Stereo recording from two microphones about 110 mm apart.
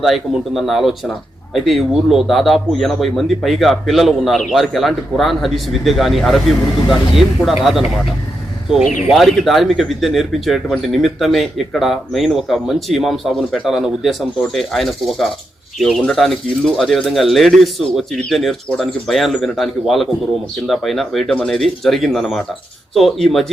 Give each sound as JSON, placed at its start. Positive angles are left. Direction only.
{"t": 0.0, "sound": "speech", "side_deg": 0}
{"t": 8.7, "sound": "speech", "side_deg": 0}